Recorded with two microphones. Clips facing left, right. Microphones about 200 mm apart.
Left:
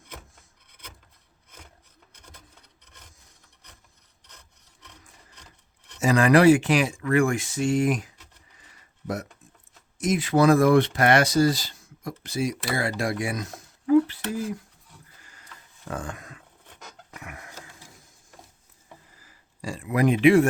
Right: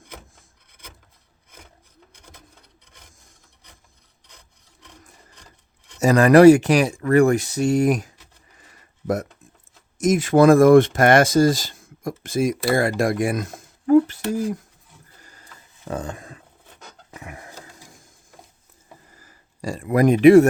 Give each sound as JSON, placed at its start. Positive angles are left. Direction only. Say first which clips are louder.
{"t": 0.7, "sound": "wood", "louder": "right 2 dB", "side_deg": -10}
{"t": 2.1, "sound": "sewing machine", "louder": "right 2 dB", "side_deg": -10}
{"t": 2.8, "sound": "rub", "louder": "right 1 dB", "side_deg": -10}
{"t": 4.3, "sound": "sawing", "louder": "right 1 dB", "side_deg": -10}
{"t": 5.3, "sound": "wood", "louder": "right 2 dB", "side_deg": -10}
{"t": 6.0, "sound": "speech", "louder": "right 6 dB", "side_deg": -40}
{"t": 8.5, "sound": "a sound", "louder": "right 4 dB", "side_deg": -50}
{"t": 10.0, "sound": "speech", "louder": "right 6 dB", "side_deg": -45}
{"t": 15.2, "sound": "a sound", "louder": "right 2 dB", "side_deg": -40}
{"t": 15.9, "sound": "speech", "louder": "right 5 dB", "side_deg": -25}
{"t": 17.2, "sound": "a sound", "louder": "right 4 dB", "side_deg": -30}
{"t": 19.1, "sound": "a sound", "louder": "right 4 dB", "side_deg": -45}